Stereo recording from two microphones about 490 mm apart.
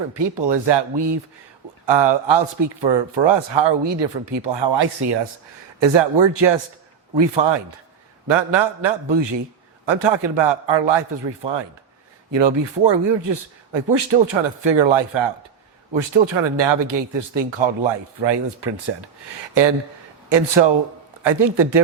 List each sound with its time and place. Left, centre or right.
0.1 s speech: right
20.3 s speech: right